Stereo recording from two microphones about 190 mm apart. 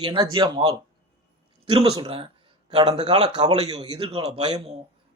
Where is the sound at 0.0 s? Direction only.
25° right (ahead or behind).